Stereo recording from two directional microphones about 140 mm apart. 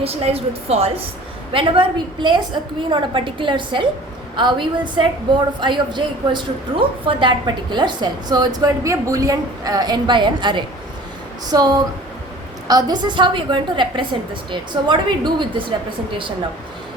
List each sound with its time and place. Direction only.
0.0 s a woman's voice: 45° right (ahead or behind)